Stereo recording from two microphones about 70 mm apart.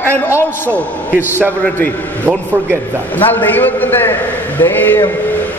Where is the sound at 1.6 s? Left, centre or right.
Left.